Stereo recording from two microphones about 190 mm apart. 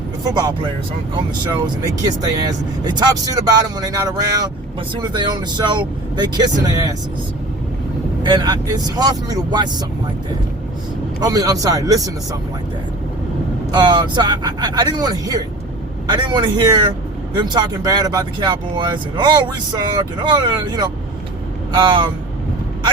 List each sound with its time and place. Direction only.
0.3 s speech: 20° right (ahead or behind)
8.2 s speech: 25° right (ahead or behind)
11.2 s speech: 20° right (ahead or behind)
13.7 s speech: 20° right (ahead or behind)